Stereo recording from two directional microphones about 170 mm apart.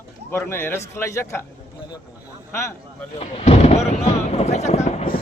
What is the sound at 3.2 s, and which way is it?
Speech, 35° left (ahead or behind).